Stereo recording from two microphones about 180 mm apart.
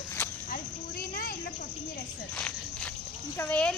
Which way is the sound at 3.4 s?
10° left (ahead or behind).